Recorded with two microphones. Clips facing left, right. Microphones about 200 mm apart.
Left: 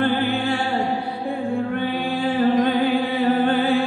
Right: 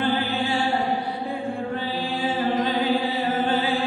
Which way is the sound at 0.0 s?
55° left (ahead or behind).